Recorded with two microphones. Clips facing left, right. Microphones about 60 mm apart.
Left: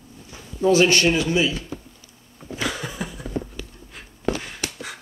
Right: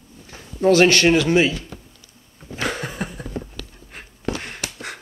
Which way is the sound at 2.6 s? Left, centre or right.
Right.